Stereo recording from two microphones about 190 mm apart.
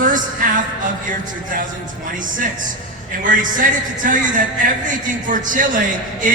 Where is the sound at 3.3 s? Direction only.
45° right (ahead or behind).